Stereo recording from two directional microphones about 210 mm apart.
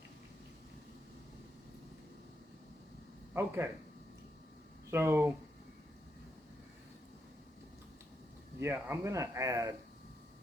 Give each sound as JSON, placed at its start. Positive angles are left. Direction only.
{"t": 3.3, "sound": "speech", "side_deg": -10}
{"t": 4.9, "sound": "speech", "side_deg": -10}
{"t": 8.5, "sound": "speech", "side_deg": -10}